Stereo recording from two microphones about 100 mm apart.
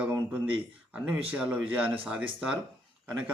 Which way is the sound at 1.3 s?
15° right (ahead or behind).